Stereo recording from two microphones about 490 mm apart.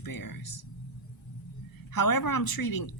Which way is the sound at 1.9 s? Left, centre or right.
Left.